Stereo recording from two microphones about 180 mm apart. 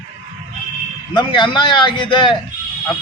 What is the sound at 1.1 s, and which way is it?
A man's voice, 25° left (ahead or behind).